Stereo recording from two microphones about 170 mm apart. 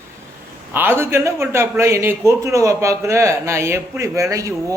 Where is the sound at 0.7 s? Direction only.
10° right (ahead or behind).